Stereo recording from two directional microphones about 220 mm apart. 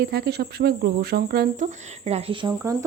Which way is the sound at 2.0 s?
30° right (ahead or behind).